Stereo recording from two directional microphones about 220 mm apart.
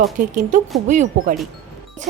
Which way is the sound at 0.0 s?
35° right (ahead or behind).